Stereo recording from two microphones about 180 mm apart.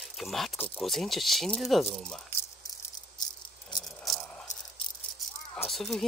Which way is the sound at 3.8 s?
5° left (ahead or behind).